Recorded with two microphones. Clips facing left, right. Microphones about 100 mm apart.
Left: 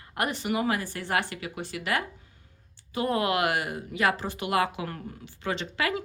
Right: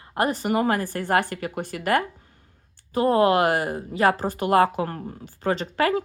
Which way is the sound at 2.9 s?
35° right (ahead or behind).